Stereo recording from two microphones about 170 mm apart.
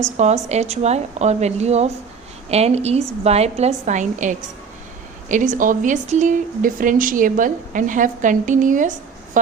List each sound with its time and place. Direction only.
0.4 s a woman's voice: 40° right (ahead or behind)